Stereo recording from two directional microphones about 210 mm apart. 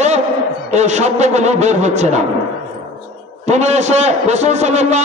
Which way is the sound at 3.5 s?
35° right (ahead or behind).